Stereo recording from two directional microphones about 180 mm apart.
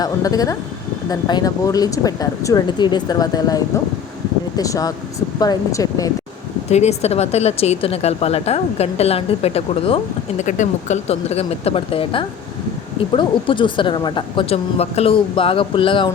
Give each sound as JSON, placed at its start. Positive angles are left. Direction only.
{"t": 0.0, "sound": "a woman's voice", "side_deg": 20}
{"t": 6.7, "sound": "a woman's voice", "side_deg": 35}